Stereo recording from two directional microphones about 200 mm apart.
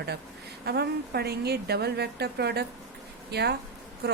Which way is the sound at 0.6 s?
55° right (ahead or behind).